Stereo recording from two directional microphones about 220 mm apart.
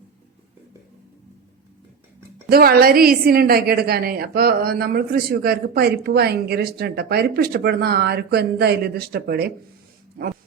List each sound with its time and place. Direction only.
2.5 s a woman's voice: 45° right (ahead or behind)